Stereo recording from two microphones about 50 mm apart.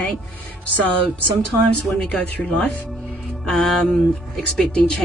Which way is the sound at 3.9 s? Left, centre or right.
Centre.